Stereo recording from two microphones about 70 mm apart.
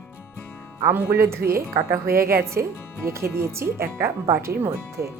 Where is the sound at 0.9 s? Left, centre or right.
Right.